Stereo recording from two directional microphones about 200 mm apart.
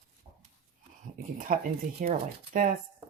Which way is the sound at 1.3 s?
45° right (ahead or behind).